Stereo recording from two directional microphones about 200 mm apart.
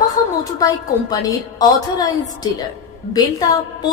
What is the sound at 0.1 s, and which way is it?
A woman's voice, 20° left (ahead or behind).